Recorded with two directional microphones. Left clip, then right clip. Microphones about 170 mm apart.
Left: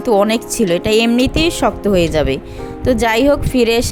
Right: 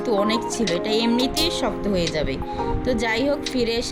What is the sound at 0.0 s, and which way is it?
Speech, 50° left (ahead or behind).